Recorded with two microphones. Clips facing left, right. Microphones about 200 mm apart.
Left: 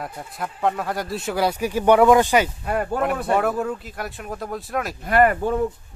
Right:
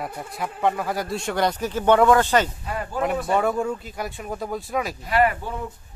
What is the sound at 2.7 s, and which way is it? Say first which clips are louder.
Speech: left 7 dB; 60° left (ahead or behind).